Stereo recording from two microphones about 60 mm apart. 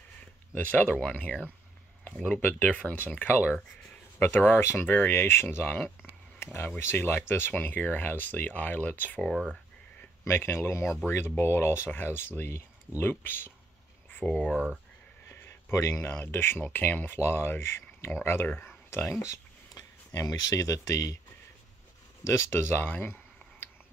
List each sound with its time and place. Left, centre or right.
0.8 s speech: centre
1.2 s speech: left
10.2 s speech: left
14.2 s speech: centre
15.2 s a sound: left
15.7 s speech: left
20.2 s speech: left
22.2 s speech: left
22.8 s a sound: left